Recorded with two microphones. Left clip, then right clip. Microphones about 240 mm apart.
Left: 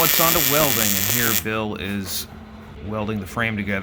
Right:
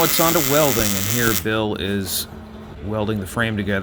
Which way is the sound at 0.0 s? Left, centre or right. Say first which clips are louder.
Right 1 dB; centre.